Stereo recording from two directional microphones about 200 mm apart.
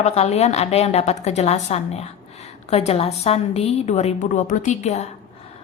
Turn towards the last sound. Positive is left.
turn(degrees=35)  # may be behind; listen again after turning